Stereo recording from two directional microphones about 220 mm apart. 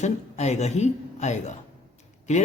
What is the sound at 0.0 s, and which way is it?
Speech, 30° left (ahead or behind).